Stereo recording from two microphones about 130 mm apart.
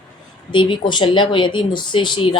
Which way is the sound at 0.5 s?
40° left (ahead or behind).